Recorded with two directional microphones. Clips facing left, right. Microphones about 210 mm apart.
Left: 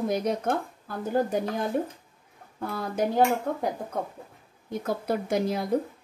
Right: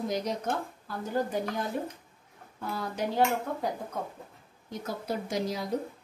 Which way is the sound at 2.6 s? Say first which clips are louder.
Left 5 dB; 50° left (ahead or behind).